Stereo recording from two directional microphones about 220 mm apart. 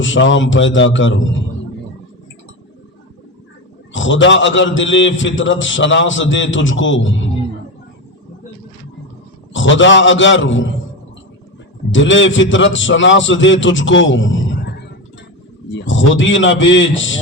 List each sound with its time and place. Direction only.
0.0 s a man's voice: 60° left (ahead or behind)
3.9 s a man's voice: 60° left (ahead or behind)
9.5 s a man's voice: 60° left (ahead or behind)
11.9 s a man's voice: 60° left (ahead or behind)
15.7 s a man's voice: 60° left (ahead or behind)